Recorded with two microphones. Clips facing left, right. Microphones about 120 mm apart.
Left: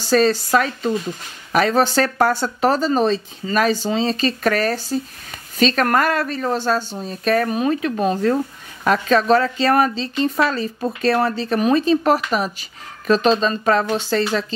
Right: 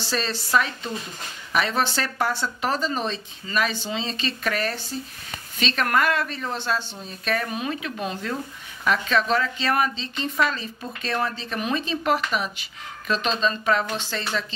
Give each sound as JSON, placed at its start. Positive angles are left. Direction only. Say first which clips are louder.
{"t": 0.0, "sound": "speech", "louder": "left 12 dB", "side_deg": 45}